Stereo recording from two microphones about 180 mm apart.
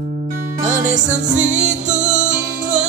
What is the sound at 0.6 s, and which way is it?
Music, 45° right (ahead or behind).